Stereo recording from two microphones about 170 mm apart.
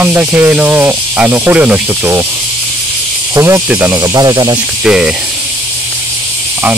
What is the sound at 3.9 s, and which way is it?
Speech, 25° right (ahead or behind).